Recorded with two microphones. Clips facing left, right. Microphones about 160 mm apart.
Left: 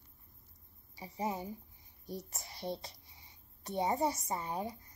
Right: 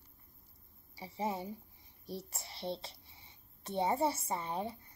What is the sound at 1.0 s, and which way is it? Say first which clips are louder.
A woman's voice: even; 25° right (ahead or behind).